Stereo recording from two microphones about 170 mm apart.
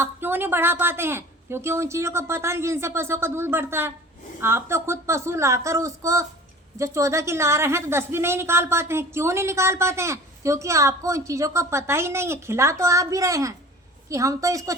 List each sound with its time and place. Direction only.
0.0 s a woman's voice: 10° right (ahead or behind)